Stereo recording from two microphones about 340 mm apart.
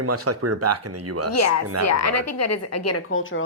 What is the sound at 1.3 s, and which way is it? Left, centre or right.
A woman's voice, left.